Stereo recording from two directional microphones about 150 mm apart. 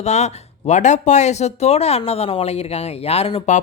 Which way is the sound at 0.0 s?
50° left (ahead or behind).